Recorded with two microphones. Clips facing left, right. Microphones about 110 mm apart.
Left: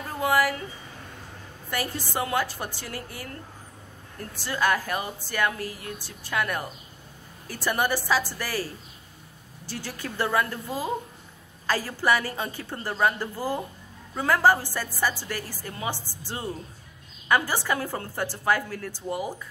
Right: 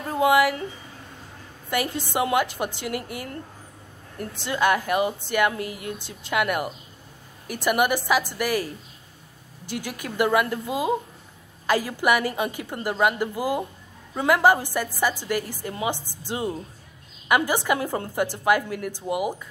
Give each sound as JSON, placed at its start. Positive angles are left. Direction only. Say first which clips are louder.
{"t": 0.1, "sound": "speech", "louder": "right 5 dB", "side_deg": -20}
{"t": 1.7, "sound": "a woman's voice", "louder": "right 4 dB", "side_deg": -20}
{"t": 9.7, "sound": "a woman's voice", "louder": "right 3 dB", "side_deg": -15}